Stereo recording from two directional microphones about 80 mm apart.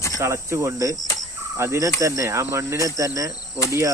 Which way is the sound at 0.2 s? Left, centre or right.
Right.